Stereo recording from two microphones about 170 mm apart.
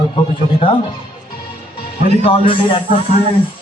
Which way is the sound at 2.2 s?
30° left (ahead or behind).